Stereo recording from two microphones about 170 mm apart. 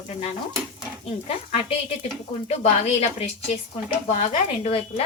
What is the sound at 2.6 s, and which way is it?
A woman's voice, 40° left (ahead or behind).